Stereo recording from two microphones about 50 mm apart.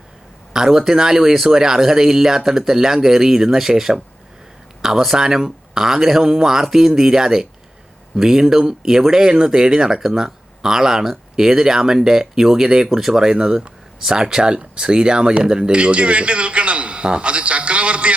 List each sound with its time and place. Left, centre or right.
0.5 s speech: centre